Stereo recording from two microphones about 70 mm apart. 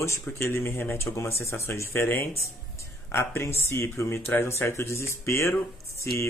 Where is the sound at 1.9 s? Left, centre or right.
Left.